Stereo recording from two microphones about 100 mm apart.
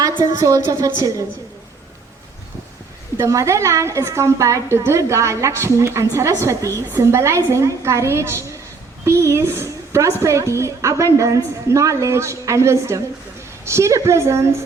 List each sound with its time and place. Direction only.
0.2 s a woman's voice: 35° right (ahead or behind)
3.2 s a woman's voice: 30° right (ahead or behind)